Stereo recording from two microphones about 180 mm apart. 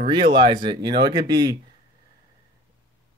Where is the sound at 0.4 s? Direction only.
25° right (ahead or behind).